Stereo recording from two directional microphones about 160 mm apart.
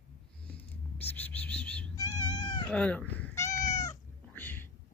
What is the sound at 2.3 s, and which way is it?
Cat, 30° left (ahead or behind).